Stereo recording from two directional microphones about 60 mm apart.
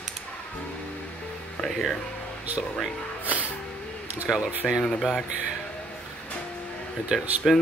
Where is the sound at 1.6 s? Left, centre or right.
Centre.